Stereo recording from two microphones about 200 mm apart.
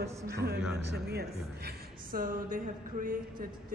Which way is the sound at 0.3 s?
55° right (ahead or behind).